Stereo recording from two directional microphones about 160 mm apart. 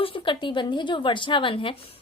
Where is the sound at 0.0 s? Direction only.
35° left (ahead or behind).